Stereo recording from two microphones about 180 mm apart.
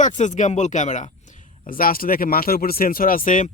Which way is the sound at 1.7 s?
55° left (ahead or behind).